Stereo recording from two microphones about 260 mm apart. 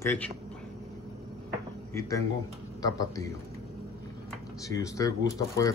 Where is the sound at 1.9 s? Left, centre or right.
Centre.